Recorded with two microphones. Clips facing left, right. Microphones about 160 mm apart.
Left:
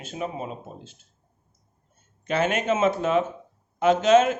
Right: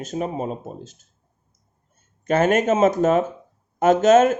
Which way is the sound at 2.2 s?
45° right (ahead or behind).